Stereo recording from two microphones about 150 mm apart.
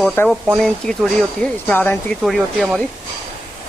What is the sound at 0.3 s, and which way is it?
Speech, centre (ahead or behind).